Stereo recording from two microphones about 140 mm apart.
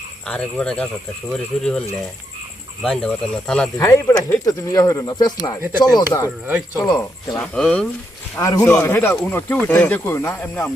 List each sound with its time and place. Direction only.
0.3 s speech: 5° left (ahead or behind)
2.8 s speech: centre (ahead or behind)
3.8 s speech: 20° left (ahead or behind)
7.3 s speech: 5° left (ahead or behind)